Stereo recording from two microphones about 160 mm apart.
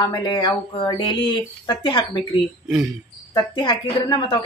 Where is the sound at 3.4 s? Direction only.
30° left (ahead or behind).